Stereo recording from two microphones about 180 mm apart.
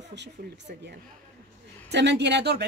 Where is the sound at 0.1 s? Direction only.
75° right (ahead or behind).